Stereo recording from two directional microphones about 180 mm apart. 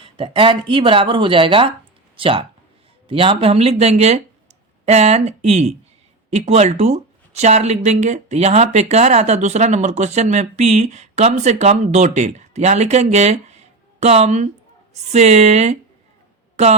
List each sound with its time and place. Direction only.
0.0 s speech: 30° right (ahead or behind)